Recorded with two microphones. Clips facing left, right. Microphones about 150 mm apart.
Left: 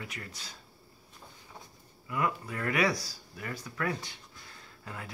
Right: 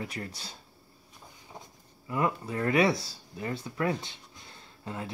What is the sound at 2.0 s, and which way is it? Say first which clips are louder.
Speech: right 3 dB; 30° right (ahead or behind).